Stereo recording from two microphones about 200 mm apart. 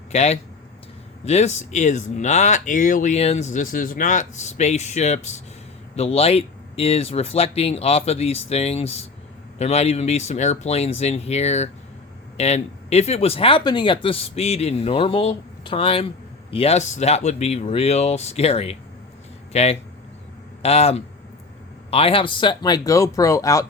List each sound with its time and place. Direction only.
0.1 s speech: 35° left (ahead or behind); by 23.6 s 15° left (ahead or behind)